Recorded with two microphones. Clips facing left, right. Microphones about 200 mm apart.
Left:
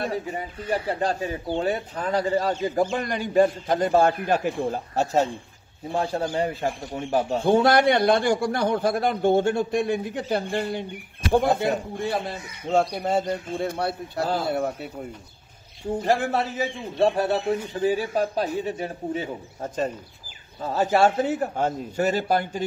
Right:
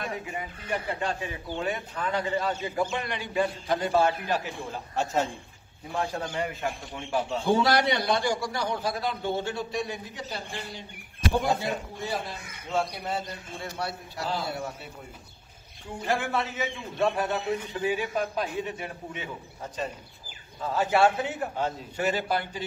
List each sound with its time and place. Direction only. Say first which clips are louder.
0.0 s a man's voice: left 6 dB; 35° left (ahead or behind); by 15.0 s 55° left (ahead or behind)
16.0 s speech: left 4 dB; 40° left (ahead or behind)